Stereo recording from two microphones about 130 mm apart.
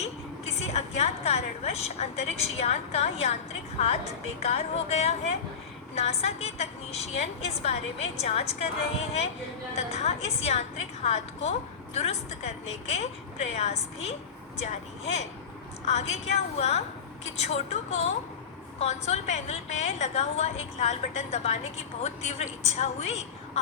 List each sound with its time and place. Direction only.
0.5 s a woman's voice: 55° left (ahead or behind)
4.4 s a woman's voice: 55° left (ahead or behind)